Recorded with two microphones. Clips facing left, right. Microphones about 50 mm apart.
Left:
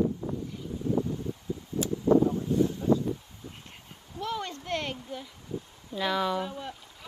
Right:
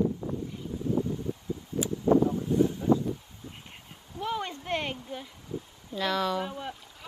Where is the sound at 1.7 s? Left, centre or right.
Right.